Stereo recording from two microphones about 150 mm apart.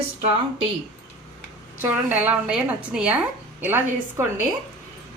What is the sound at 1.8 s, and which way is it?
A woman's voice, 10° right (ahead or behind).